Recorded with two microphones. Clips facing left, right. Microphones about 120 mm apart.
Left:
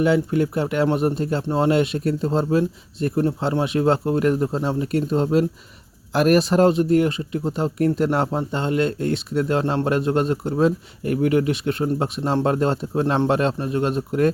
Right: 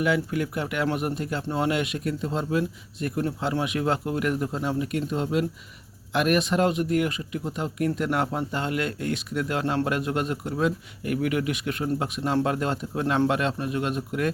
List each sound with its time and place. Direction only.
0.0 s speech: 30° left (ahead or behind)